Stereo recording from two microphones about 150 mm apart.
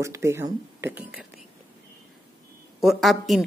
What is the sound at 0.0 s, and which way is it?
Speech, 20° right (ahead or behind).